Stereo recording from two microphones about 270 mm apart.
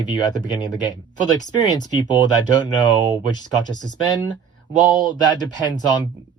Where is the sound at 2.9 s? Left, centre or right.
Right.